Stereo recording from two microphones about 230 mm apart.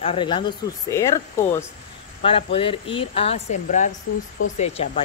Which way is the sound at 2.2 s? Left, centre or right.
Left.